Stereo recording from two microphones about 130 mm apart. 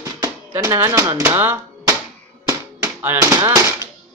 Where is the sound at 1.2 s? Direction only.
15° right (ahead or behind).